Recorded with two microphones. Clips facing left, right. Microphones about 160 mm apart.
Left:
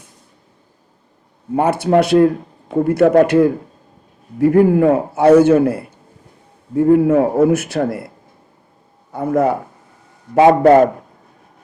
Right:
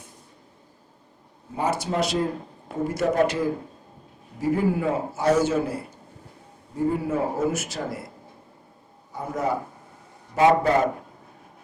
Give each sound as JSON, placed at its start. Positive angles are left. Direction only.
{"t": 1.5, "sound": "a man's voice", "side_deg": 60}
{"t": 9.1, "sound": "a man's voice", "side_deg": 60}